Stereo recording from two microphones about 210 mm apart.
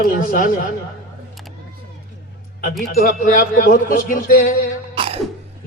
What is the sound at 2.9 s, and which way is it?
Speech, 45° left (ahead or behind).